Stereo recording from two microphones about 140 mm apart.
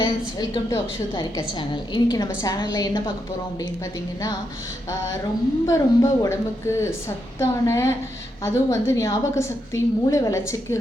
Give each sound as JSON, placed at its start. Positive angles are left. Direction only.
{"t": 0.0, "sound": "a woman's voice", "side_deg": 35}
{"t": 4.9, "sound": "a woman's voice", "side_deg": 20}